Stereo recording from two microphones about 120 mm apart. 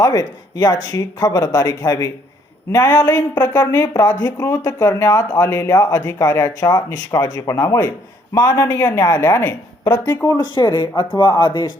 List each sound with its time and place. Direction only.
0.0 s speech: 30° left (ahead or behind)
3.6 s speech: 15° left (ahead or behind)
4.2 s a man's voice: 30° left (ahead or behind)
10.0 s speech: 15° left (ahead or behind)
10.2 s speech: 40° left (ahead or behind)